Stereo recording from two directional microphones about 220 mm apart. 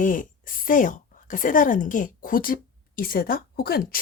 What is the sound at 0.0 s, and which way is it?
A woman's voice, 35° left (ahead or behind).